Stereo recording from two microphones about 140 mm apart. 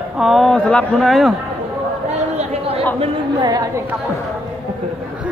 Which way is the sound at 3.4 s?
25° right (ahead or behind).